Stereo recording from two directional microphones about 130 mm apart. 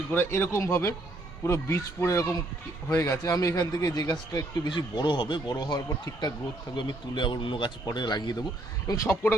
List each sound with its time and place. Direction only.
0.1 s speech: 20° left (ahead or behind)